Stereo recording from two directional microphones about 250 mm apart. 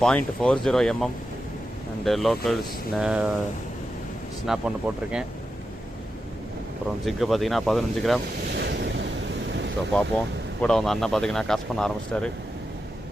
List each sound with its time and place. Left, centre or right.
0.0 s speech: centre
4.4 s speech: centre
7.0 s speech: centre
8.5 s waves: right
9.9 s speech: centre